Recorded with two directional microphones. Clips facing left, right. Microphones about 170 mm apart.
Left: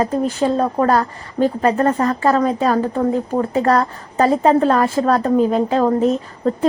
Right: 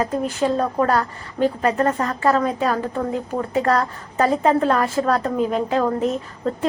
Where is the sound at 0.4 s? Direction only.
35° left (ahead or behind).